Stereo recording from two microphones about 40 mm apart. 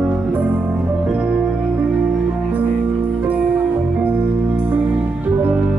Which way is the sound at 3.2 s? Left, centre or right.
Right.